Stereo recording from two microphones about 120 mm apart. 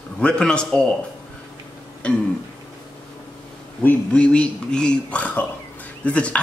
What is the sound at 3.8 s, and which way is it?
Speech, 10° left (ahead or behind).